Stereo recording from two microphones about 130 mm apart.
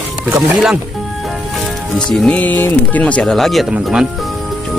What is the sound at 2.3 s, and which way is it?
Speech, 15° left (ahead or behind).